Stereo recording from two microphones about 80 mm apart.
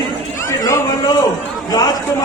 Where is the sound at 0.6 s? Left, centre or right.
Left.